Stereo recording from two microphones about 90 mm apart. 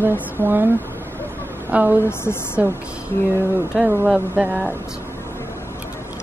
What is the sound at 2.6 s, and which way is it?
Speech, 20° right (ahead or behind).